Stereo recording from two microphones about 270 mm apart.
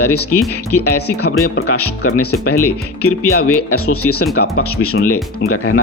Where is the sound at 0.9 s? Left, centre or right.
Left.